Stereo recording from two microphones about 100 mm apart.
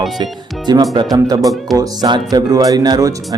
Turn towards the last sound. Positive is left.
turn(degrees=-40)  # may be behind; listen again after turning